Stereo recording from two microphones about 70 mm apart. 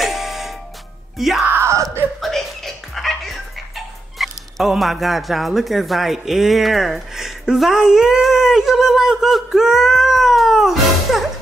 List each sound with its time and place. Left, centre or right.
0.0 s music: centre
1.1 s speech: centre